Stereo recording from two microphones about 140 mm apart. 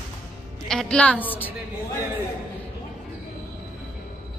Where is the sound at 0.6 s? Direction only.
5° left (ahead or behind).